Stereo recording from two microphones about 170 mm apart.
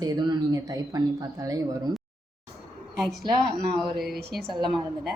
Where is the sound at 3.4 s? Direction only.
Centre (ahead or behind).